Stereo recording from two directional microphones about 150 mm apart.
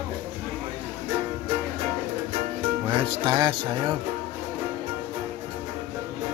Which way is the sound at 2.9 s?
35° right (ahead or behind).